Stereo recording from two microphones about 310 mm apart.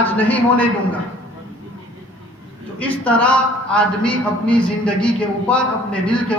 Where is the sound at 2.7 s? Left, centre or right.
Centre.